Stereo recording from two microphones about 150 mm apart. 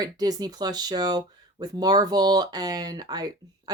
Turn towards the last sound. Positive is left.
turn(degrees=-25)  # may be behind; listen again after turning